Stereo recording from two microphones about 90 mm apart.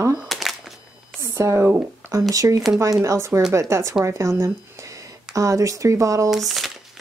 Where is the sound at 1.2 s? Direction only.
35° right (ahead or behind).